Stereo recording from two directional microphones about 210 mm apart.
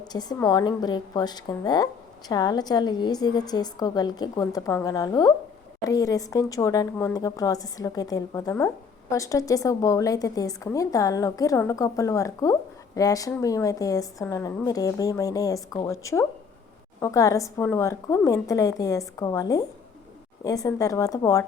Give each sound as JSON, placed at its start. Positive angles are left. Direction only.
{"t": 0.0, "sound": "a woman's voice", "side_deg": 20}